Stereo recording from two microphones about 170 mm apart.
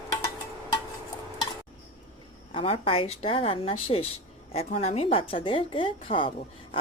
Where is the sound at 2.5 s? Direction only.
35° left (ahead or behind).